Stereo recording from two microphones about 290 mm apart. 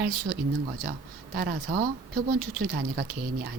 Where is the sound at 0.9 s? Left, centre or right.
Right.